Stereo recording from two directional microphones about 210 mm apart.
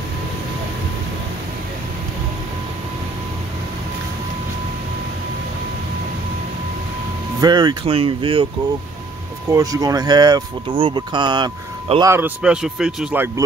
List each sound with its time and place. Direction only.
7.3 s speech: 20° right (ahead or behind)
9.5 s speech: 15° right (ahead or behind)